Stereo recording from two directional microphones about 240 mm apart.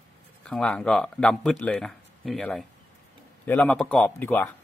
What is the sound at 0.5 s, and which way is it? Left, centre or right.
Speech, centre.